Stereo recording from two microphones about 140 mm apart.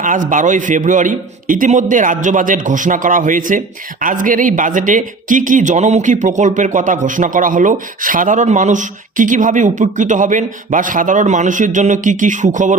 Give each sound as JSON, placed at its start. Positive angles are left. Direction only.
{"t": 0.0, "sound": "a man's voice", "side_deg": -65}